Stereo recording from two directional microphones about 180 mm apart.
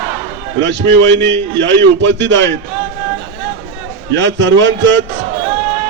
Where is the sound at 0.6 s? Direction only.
90° right.